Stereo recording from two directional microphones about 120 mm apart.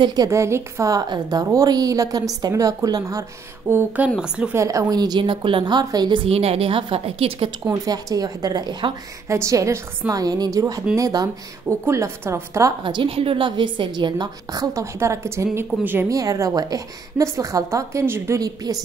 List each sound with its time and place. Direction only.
0.0 s a woman's voice: 35° right (ahead or behind); by 4.6 s 10° right (ahead or behind)
4.6 s a woman's voice: 25° right (ahead or behind)
6.2 s a woman's voice: 55° right (ahead or behind)
7.6 s a woman's voice: 30° right (ahead or behind)
12.8 s a woman's voice: 45° right (ahead or behind); by 16.1 s 15° right (ahead or behind)
16.1 s a woman's voice: 30° right (ahead or behind)